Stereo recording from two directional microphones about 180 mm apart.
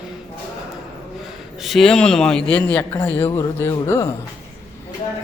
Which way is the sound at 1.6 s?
Centre (ahead or behind).